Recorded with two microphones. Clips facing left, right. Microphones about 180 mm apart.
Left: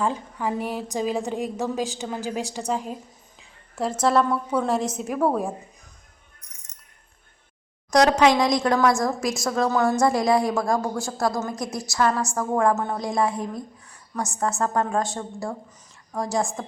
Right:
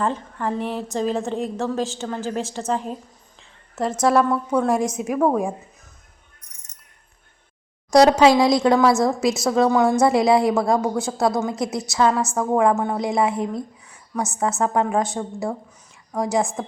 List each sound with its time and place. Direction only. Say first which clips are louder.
0.0 s a woman's voice: right 1 dB; 5° left (ahead or behind)
7.9 s a woman's voice: right 4 dB; 30° right (ahead or behind)
8.8 s a woman's voice: right 4 dB; 5° right (ahead or behind)
9.6 s a woman's voice: right 5 dB; 20° right (ahead or behind)
9.8 s a woman's voice: right 3 dB; centre (ahead or behind)
10.3 s a woman's voice: right 4 dB; 25° right (ahead or behind)
12.1 s a woman's voice: right 3 dB; centre (ahead or behind)
12.4 s a woman's voice: right 3 dB; 20° right (ahead or behind)
14.2 s a woman's voice: right 3 dB; centre (ahead or behind)
14.6 s a woman's voice: right 4 dB; 15° right (ahead or behind)
15.1 s a woman's voice: right 4 dB; centre (ahead or behind)
16.1 s a woman's voice: right 4 dB; 15° right (ahead or behind)